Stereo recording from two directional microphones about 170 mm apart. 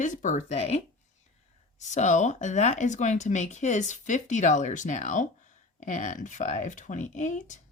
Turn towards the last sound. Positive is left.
turn(degrees=45)  # may be behind; listen again after turning